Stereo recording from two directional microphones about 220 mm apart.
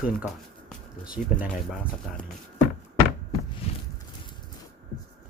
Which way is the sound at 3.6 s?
25° left (ahead or behind).